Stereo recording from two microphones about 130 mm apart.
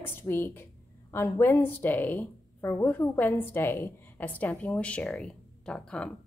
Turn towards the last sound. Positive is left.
turn(degrees=5)  # may be behind; listen again after turning